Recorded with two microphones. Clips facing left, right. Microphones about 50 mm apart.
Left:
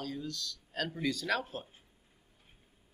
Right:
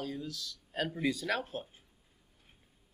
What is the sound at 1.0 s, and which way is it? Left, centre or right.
Speech, centre.